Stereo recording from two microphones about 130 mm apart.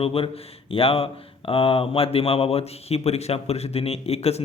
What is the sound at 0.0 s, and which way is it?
Speech, 45° left (ahead or behind).